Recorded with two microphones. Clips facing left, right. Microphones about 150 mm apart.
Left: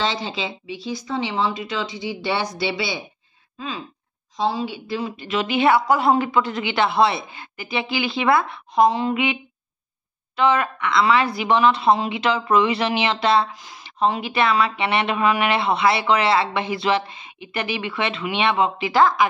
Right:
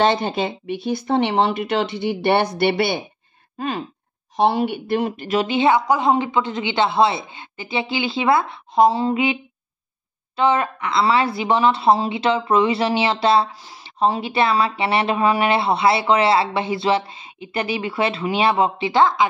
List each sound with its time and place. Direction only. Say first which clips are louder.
0.0 s speech: right 7 dB; 55° right (ahead or behind)
5.4 s a woman's voice: even; 25° right (ahead or behind)